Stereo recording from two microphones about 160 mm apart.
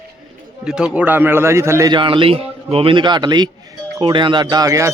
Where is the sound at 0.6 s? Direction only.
5° right (ahead or behind).